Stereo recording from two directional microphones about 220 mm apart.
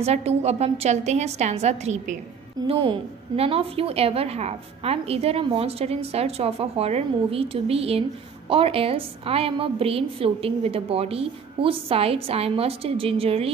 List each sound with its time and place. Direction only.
0.0 s a woman's voice: 30° right (ahead or behind)